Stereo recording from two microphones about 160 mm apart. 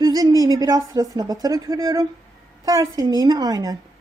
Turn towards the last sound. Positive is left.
turn(degrees=-25)  # may be behind; listen again after turning